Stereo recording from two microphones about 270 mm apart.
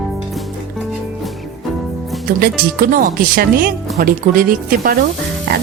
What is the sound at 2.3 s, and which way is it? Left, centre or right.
Speech, right.